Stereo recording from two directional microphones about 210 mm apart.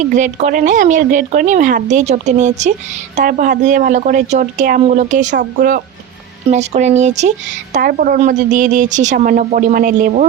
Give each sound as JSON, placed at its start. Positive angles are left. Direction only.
{"t": 0.1, "sound": "speech", "side_deg": -35}